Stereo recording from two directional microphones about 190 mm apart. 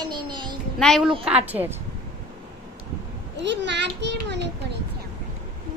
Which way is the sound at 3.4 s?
65° right (ahead or behind).